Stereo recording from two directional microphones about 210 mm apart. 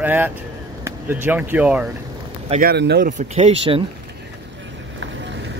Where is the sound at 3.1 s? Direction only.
30° right (ahead or behind).